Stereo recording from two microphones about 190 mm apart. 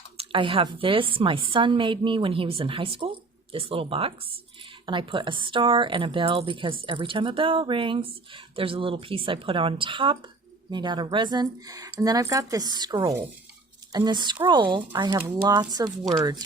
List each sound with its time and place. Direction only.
0.2 s speech: 25° right (ahead or behind)